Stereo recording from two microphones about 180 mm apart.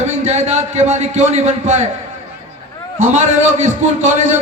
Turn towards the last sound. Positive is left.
turn(degrees=-40)  # may be behind; listen again after turning